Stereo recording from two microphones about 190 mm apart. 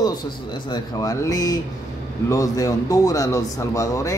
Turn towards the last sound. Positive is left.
turn(degrees=15)  # may be behind; listen again after turning